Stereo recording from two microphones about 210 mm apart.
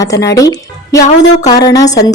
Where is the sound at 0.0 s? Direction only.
15° left (ahead or behind).